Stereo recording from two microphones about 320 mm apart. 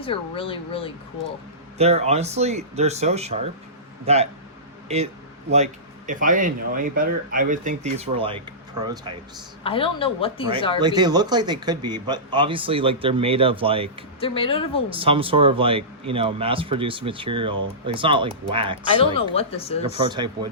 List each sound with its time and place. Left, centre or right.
0.0 s speech: centre
1.8 s speech: centre
6.1 s a man's voice: right
9.6 s speech: centre
10.8 s a man's voice: centre
14.2 s speech: centre
14.8 s a man's voice: centre
18.9 s speech: centre
19.9 s a man's voice: centre